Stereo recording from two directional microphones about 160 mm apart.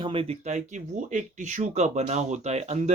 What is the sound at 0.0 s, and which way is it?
Speech, 35° right (ahead or behind).